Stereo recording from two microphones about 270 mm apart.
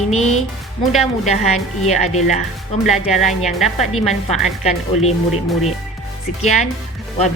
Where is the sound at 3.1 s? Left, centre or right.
Centre.